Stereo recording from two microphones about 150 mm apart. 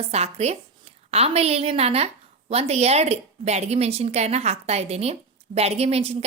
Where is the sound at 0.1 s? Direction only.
45° right (ahead or behind).